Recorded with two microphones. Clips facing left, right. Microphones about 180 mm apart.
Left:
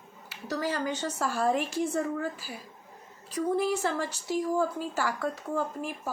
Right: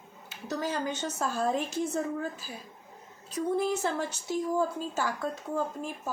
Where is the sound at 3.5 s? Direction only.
20° right (ahead or behind).